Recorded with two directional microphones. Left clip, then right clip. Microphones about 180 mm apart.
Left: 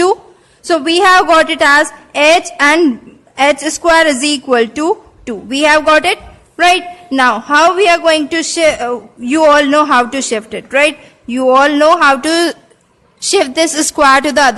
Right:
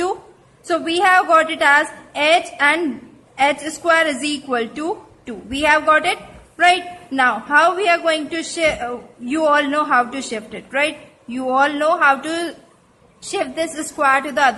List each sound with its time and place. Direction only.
0.7 s a woman's voice: 50° left (ahead or behind)